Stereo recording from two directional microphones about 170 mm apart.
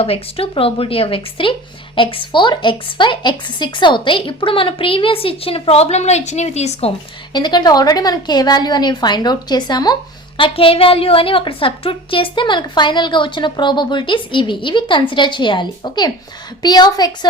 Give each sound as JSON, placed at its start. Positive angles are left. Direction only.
{"t": 0.0, "sound": "a woman's voice", "side_deg": 35}
{"t": 7.3, "sound": "a woman's voice", "side_deg": 25}